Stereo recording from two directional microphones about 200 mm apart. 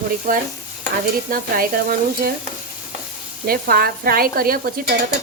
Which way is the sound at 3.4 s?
45° right (ahead or behind).